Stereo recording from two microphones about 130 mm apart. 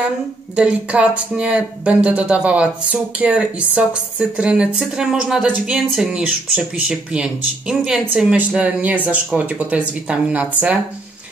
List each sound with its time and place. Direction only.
0.6 s speech: 10° right (ahead or behind)